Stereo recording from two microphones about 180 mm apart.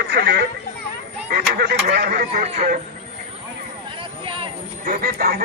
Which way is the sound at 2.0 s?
55° right (ahead or behind).